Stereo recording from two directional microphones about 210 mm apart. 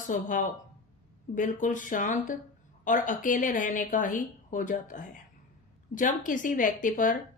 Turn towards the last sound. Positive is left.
turn(degrees=40)  # may be behind; listen again after turning